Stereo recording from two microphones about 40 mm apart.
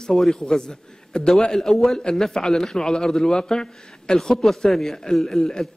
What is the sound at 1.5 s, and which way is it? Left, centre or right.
A man's voice, centre.